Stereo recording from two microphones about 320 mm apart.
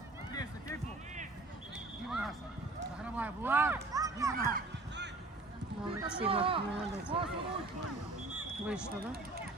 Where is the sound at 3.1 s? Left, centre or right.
Centre.